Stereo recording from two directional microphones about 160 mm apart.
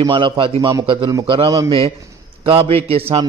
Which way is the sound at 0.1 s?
30° right (ahead or behind).